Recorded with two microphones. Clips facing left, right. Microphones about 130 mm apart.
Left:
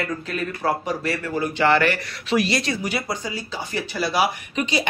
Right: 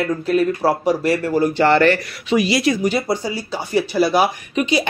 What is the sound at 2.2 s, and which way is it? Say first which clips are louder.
Speech: right 5 dB; centre (ahead or behind).